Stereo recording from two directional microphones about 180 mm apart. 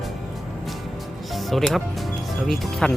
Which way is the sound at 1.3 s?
Centre (ahead or behind).